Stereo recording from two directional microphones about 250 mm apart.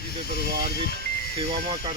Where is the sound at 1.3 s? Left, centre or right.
Centre.